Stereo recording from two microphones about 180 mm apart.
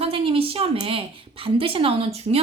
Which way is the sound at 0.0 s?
30° right (ahead or behind).